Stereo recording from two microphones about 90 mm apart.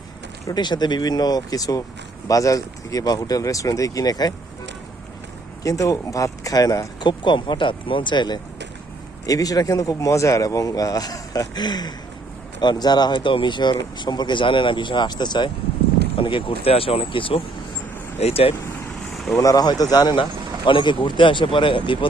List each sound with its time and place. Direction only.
0.4 s speech: 55° left (ahead or behind)
5.6 s speech: 40° left (ahead or behind)
7.1 s speech: 60° left (ahead or behind)
9.2 s speech: 40° left (ahead or behind)
16.1 s speech: 80° left
18.3 s speech: 90° left
19.1 s vehicle: centre (ahead or behind)
19.4 s speech: 45° left (ahead or behind)
20.7 s speech: 65° left (ahead or behind)